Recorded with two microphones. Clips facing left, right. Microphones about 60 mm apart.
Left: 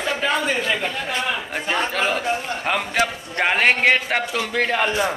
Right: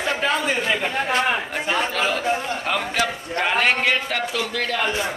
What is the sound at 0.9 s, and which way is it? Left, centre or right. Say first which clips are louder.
Speech: right 4 dB; right.